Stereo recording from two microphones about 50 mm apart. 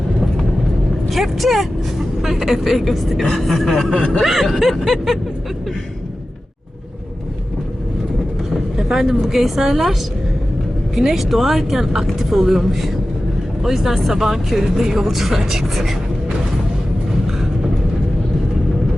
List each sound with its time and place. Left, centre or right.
1.1 s speech: centre
3.9 s speech: left
4.2 s speech: centre
8.4 s a sound: centre
9.2 s speech: centre
10.9 s speech: centre